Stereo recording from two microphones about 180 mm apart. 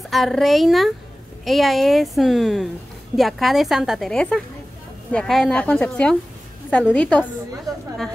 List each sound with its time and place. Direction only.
0.1 s a woman's voice: centre (ahead or behind)
7.7 s speech: 20° right (ahead or behind)